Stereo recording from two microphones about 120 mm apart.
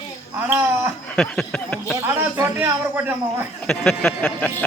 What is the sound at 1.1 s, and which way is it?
Speech, 5° left (ahead or behind).